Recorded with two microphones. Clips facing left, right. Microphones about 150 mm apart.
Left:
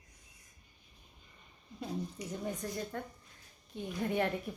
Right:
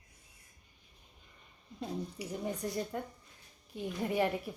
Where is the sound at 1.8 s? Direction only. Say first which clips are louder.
Even; 10° right (ahead or behind).